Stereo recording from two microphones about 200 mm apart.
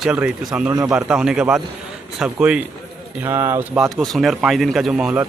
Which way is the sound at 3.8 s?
Centre (ahead or behind).